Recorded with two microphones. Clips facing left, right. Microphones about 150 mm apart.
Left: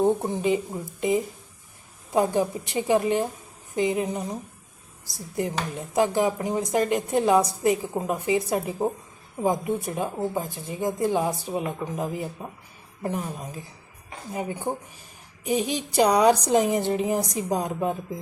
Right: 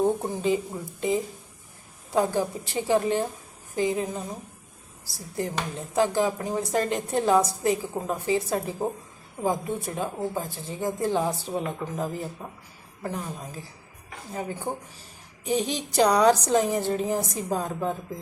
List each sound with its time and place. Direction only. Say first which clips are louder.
0.0 s a woman's voice: left 2 dB; 15° left (ahead or behind)